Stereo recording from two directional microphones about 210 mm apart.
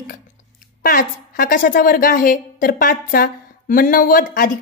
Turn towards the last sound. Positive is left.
turn(degrees=40)  # may be behind; listen again after turning